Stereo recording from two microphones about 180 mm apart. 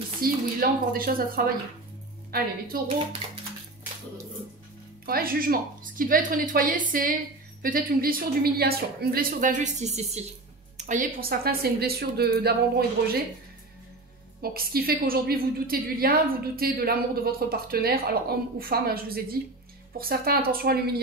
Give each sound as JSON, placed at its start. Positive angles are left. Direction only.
{"t": 0.2, "sound": "a woman's voice", "side_deg": -55}
{"t": 5.0, "sound": "a woman's voice", "side_deg": -55}
{"t": 14.4, "sound": "a woman's voice", "side_deg": -55}